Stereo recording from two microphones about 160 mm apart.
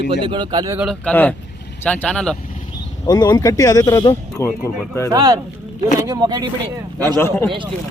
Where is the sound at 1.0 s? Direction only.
10° left (ahead or behind).